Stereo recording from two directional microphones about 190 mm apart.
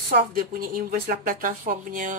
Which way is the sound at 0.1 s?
50° right (ahead or behind).